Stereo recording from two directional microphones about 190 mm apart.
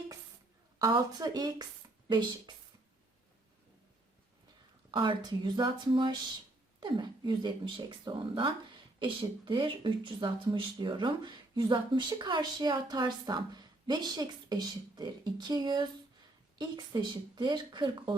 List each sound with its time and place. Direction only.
0.8 s speech: 20° right (ahead or behind)
4.9 s speech: 25° right (ahead or behind)